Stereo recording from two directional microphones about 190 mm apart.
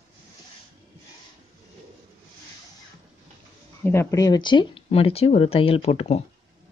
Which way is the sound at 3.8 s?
15° left (ahead or behind).